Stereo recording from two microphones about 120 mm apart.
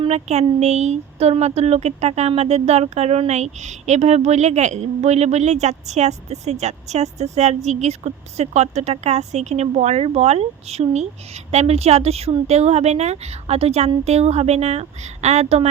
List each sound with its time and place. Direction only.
0.0 s speech: 65° right (ahead or behind)